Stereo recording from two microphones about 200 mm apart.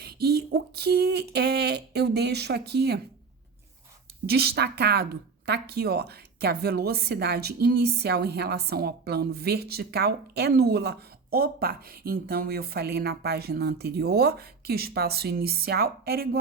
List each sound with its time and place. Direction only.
0.0 s speech: 50° right (ahead or behind)
4.3 s a woman's voice: 50° right (ahead or behind)